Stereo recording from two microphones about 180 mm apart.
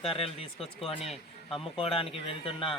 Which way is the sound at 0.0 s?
30° left (ahead or behind).